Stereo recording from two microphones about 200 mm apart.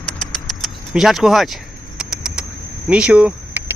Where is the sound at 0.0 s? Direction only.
Centre (ahead or behind).